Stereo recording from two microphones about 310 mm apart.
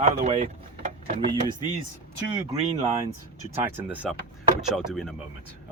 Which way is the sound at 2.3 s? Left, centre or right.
Centre.